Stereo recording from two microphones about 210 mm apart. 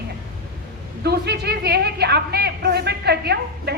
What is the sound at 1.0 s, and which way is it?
A woman's voice, 50° right (ahead or behind).